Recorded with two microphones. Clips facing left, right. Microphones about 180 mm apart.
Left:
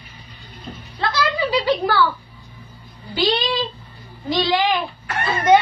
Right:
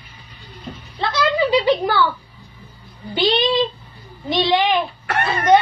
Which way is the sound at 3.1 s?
25° right (ahead or behind).